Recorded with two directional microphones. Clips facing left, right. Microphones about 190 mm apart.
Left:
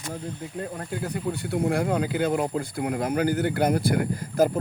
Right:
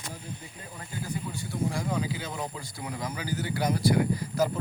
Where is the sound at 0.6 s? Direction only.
65° left (ahead or behind).